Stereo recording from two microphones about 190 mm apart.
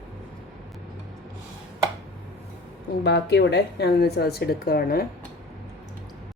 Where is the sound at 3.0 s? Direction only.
65° left (ahead or behind).